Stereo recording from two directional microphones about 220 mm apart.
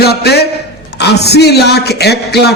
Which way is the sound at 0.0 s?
45° left (ahead or behind).